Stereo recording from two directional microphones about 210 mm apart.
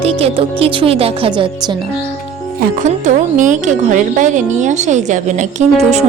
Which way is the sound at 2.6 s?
40° right (ahead or behind).